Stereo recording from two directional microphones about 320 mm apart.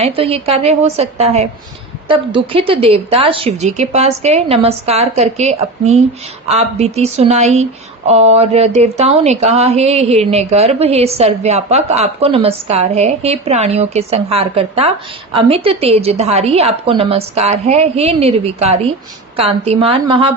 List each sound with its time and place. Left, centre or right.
0.0 s a woman's voice: centre